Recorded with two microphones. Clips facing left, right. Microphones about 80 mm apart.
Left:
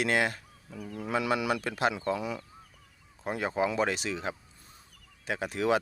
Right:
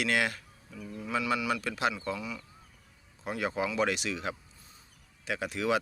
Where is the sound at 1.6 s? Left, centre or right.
Left.